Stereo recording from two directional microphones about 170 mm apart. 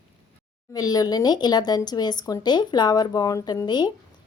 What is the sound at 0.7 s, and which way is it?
Speech, 20° left (ahead or behind).